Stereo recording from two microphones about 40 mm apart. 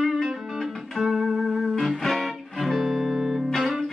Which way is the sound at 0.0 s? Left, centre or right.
Centre.